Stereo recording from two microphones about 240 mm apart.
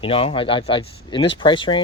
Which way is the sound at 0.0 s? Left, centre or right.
Left.